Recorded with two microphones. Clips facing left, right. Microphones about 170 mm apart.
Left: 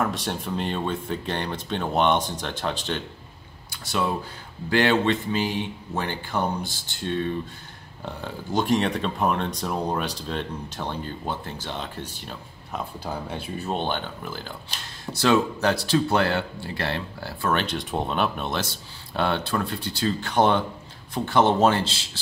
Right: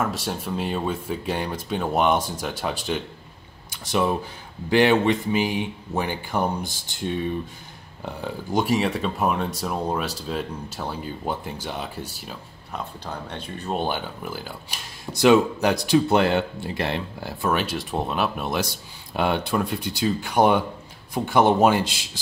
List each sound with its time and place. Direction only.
0.0 s speech: centre (ahead or behind)
13.0 s speech: 5° left (ahead or behind)
13.7 s speech: 10° right (ahead or behind)
17.5 s speech: 5° right (ahead or behind)